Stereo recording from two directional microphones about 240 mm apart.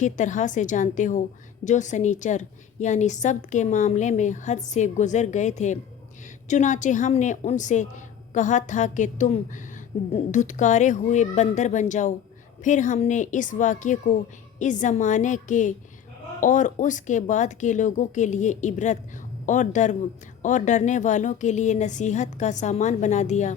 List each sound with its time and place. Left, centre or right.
0.0 s a woman's voice: left